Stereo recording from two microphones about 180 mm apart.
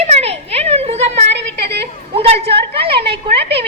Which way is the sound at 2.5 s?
65° right (ahead or behind).